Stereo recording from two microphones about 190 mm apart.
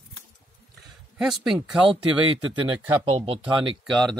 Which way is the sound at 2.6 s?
30° right (ahead or behind).